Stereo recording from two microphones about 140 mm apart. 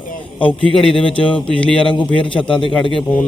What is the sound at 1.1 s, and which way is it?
A man's voice, 35° left (ahead or behind).